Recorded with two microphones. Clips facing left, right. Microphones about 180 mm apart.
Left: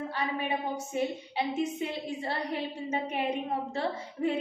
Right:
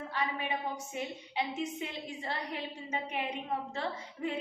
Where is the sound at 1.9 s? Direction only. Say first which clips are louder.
Left 5 dB; 30° left (ahead or behind).